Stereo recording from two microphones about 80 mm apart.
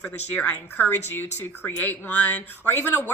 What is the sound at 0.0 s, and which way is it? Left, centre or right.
Speech, centre.